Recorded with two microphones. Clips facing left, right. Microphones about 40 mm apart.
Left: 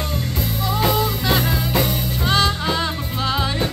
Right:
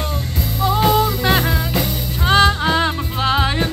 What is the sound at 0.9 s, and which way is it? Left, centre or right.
Music, right.